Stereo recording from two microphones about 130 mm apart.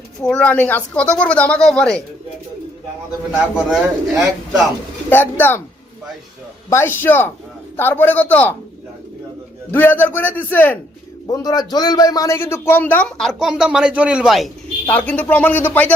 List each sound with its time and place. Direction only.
0.2 s a man's voice: 5° left (ahead or behind)
3.7 s a man's voice: centre (ahead or behind)
5.0 s a man's voice: 15° left (ahead or behind)
6.7 s a man's voice: 20° left (ahead or behind)
9.7 s a man's voice: 15° left (ahead or behind)
11.3 s a man's voice: 30° left (ahead or behind); by 14.5 s centre (ahead or behind)
14.8 s a man's voice: 15° left (ahead or behind)